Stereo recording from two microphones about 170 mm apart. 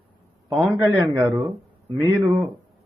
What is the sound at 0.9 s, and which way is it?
Speech, 20° right (ahead or behind).